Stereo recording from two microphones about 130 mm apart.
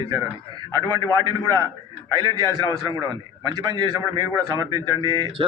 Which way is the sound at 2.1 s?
35° right (ahead or behind).